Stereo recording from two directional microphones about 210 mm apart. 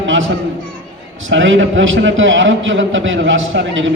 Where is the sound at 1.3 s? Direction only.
65° right (ahead or behind).